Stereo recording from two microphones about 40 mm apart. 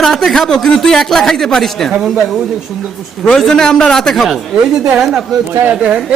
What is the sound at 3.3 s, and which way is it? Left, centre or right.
Speech, centre.